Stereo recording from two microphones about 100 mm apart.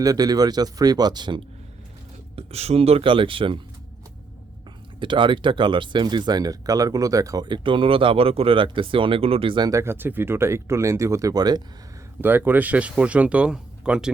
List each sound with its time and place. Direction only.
0.0 s speech: 40° right (ahead or behind)
2.3 s speech: 90° right; by 3.6 s 60° right (ahead or behind)
4.9 s speech: 55° right (ahead or behind); by 7.4 s 35° right (ahead or behind)
7.4 s speech: 55° right (ahead or behind)
9.6 s speech: 30° right (ahead or behind)
12.2 s speech: 20° right (ahead or behind)